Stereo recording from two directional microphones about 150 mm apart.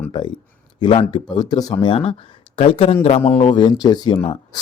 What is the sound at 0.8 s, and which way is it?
Speech, 35° left (ahead or behind).